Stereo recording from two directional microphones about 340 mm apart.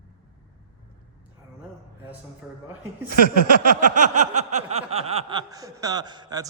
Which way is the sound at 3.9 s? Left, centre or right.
Right.